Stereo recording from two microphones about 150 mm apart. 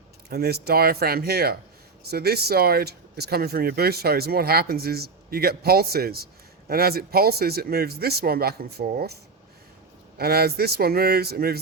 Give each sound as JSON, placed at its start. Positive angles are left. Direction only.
{"t": 0.3, "sound": "speech", "side_deg": -90}
{"t": 10.2, "sound": "speech", "side_deg": -90}